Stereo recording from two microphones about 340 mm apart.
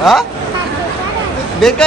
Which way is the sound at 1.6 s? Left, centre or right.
Centre.